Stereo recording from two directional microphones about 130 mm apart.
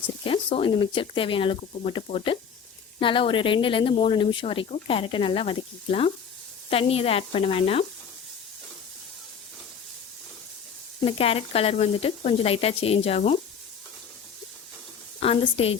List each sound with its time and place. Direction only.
0.3 s speech: 45° left (ahead or behind)
11.0 s speech: 45° left (ahead or behind)
15.2 s speech: 45° left (ahead or behind)